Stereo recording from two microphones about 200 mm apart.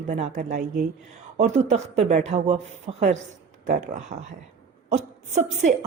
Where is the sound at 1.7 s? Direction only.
35° right (ahead or behind).